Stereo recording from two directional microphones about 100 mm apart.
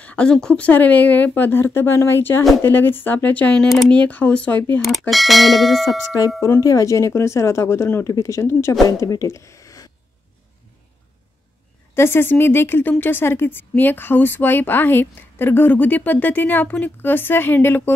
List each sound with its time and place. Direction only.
0.0 s speech: 10° left (ahead or behind)
5.1 s bell: centre (ahead or behind)
6.6 s speech: 35° left (ahead or behind)
11.9 s speech: 25° left (ahead or behind)